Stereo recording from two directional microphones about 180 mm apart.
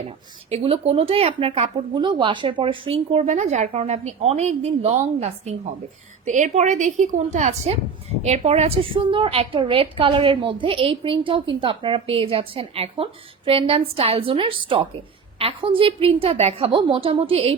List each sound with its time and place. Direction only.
0.5 s a woman's voice: 30° right (ahead or behind)